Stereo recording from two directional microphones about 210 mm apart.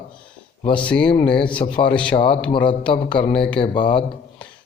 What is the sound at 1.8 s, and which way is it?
Speech, 5° left (ahead or behind).